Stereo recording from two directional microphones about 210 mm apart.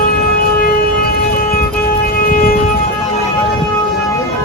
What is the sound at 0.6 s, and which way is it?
Siren, 45° left (ahead or behind).